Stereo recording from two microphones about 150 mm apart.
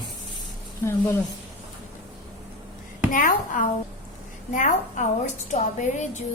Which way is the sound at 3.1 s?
65° left (ahead or behind).